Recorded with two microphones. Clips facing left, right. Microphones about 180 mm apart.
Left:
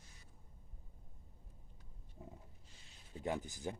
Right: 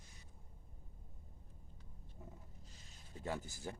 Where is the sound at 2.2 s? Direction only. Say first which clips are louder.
Left 3 dB; 15° left (ahead or behind).